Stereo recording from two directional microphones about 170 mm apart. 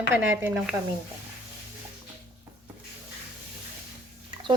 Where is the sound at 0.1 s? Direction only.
10° right (ahead or behind).